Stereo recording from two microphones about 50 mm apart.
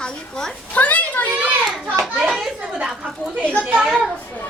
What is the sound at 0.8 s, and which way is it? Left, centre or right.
Children playing, left.